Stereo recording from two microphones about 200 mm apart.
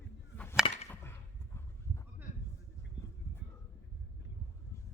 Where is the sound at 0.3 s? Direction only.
15° left (ahead or behind).